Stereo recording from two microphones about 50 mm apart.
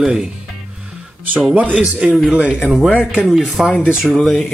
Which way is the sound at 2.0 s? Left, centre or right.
Right.